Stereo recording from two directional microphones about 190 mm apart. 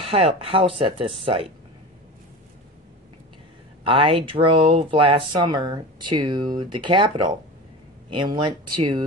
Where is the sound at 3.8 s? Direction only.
25° right (ahead or behind).